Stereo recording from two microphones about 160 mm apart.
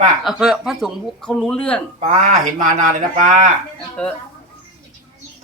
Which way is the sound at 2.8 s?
55° right (ahead or behind).